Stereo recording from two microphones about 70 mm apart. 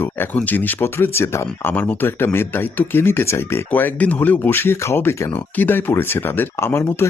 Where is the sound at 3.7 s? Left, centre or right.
Left.